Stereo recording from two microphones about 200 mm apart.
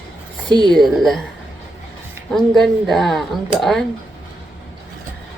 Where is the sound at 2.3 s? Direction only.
Centre (ahead or behind).